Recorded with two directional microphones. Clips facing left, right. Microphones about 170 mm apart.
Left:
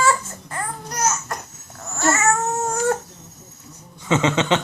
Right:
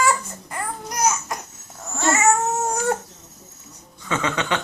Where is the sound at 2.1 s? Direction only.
15° right (ahead or behind).